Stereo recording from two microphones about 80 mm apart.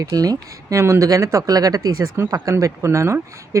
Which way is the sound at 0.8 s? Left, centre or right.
Right.